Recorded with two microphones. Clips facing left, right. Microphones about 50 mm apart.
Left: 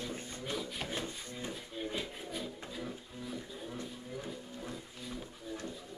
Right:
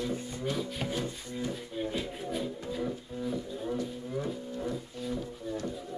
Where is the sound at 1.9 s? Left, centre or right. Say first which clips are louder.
Right 5 dB; centre.